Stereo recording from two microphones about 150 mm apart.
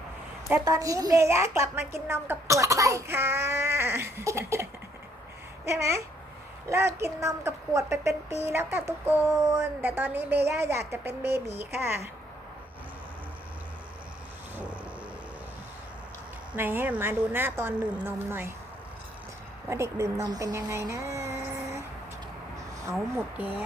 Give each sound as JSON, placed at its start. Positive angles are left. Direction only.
{"t": 0.6, "sound": "a woman's voice", "side_deg": -20}
{"t": 14.5, "sound": "a sound", "side_deg": -10}
{"t": 16.6, "sound": "a woman's voice", "side_deg": -15}
{"t": 19.7, "sound": "speech", "side_deg": -20}
{"t": 22.8, "sound": "a woman's voice", "side_deg": -20}